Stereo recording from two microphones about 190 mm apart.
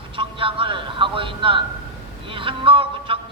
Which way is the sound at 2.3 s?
30° right (ahead or behind).